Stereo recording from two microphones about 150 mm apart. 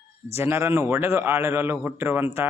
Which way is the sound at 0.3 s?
15° right (ahead or behind).